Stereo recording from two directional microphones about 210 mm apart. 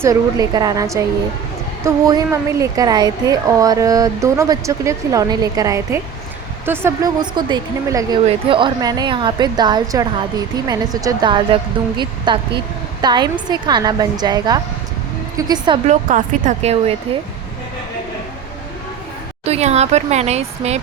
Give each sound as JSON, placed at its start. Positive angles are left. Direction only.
{"t": 0.0, "sound": "a woman's voice", "side_deg": -15}
{"t": 15.9, "sound": "speech", "side_deg": -35}
{"t": 19.5, "sound": "speech", "side_deg": -30}